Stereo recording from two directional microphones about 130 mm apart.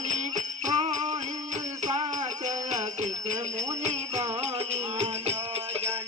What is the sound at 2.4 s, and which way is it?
Jingle bell, 65° right (ahead or behind).